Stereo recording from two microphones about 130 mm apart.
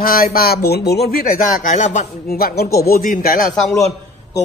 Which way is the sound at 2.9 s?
90° left.